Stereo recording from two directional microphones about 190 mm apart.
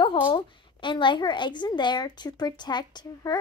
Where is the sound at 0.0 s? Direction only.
25° left (ahead or behind).